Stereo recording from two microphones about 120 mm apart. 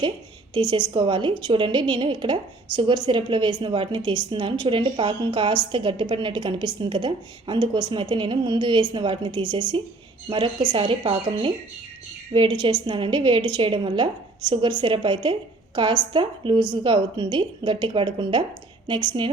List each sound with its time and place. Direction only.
0.5 s a woman's voice: 40° right (ahead or behind)